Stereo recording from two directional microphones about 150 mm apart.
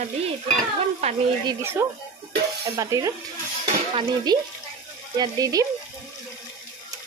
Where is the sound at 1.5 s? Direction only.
15° right (ahead or behind).